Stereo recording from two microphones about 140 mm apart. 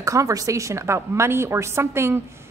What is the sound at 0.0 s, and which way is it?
A woman's voice, 20° right (ahead or behind).